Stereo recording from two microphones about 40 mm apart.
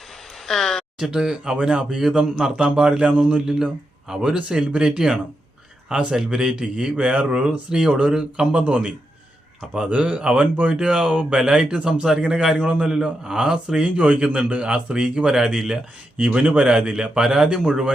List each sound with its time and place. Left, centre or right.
0.4 s speech: centre
0.9 s a man's voice: centre
2.5 s a man's voice: right
4.4 s a man's voice: right
7.7 s a man's voice: centre
8.5 s speech: right
9.9 s speech: right
10.8 s a man's voice: right
11.3 s a man's voice: centre
11.7 s a man's voice: right; by 15.8 s centre
16.2 s speech: right
16.6 s a man's voice: right